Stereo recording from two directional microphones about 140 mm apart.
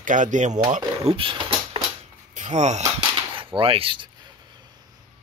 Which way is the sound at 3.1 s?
40° right (ahead or behind).